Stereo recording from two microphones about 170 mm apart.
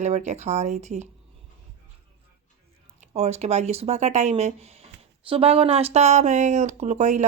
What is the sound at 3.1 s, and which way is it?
Speech, 40° right (ahead or behind).